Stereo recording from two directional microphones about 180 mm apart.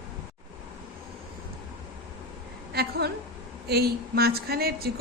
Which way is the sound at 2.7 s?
60° right (ahead or behind).